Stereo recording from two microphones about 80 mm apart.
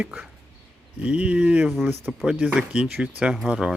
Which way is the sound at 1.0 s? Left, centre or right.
Centre.